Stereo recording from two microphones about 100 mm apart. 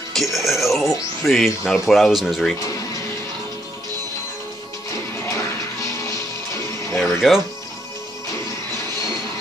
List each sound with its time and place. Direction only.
0.1 s speech: centre (ahead or behind)
5.2 s music: 35° left (ahead or behind)
7.0 s music: centre (ahead or behind)